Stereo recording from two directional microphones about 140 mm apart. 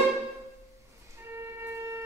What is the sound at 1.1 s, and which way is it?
Music, 20° right (ahead or behind).